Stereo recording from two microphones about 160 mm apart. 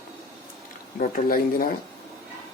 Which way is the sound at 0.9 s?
60° left (ahead or behind).